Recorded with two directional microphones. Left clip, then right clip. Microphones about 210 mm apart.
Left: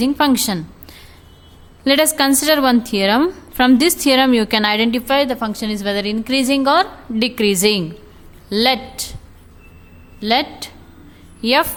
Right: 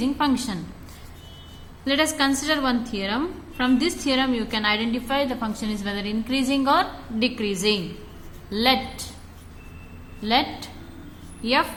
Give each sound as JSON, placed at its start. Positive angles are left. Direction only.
{"t": 0.0, "sound": "a woman's voice", "side_deg": 50}
{"t": 1.8, "sound": "a woman's voice", "side_deg": 55}
{"t": 10.2, "sound": "a woman's voice", "side_deg": 45}